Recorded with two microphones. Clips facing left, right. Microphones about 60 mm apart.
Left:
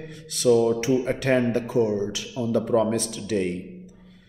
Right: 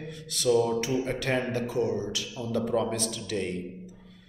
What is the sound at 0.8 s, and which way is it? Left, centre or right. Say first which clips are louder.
A man's voice: left 6 dB; left.